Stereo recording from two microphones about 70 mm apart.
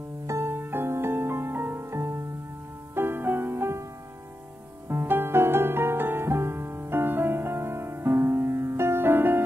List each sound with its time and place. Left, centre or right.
0.3 s music: right
4.8 s music: right